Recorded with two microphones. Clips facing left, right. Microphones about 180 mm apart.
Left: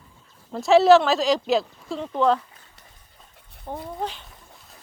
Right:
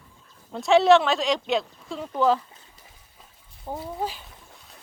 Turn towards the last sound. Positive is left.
turn(degrees=-5)  # may be behind; listen again after turning